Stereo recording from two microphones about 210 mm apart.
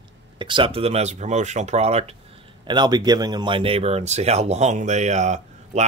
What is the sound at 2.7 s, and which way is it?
Speech, 20° right (ahead or behind).